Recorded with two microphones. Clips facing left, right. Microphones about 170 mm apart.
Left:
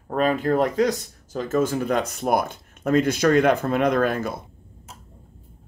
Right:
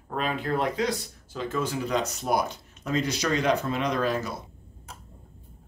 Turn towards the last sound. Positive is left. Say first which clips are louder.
# left 5 dB
turn(degrees=55)  # may be behind; listen again after turning